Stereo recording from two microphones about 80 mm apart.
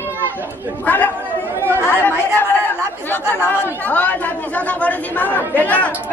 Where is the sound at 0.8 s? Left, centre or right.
Left.